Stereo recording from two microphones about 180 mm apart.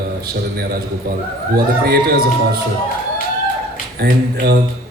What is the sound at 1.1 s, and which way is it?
Speech, 55° right (ahead or behind).